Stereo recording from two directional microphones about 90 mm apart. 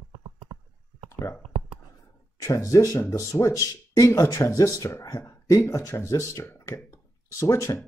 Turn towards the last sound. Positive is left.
turn(degrees=35)  # may be behind; listen again after turning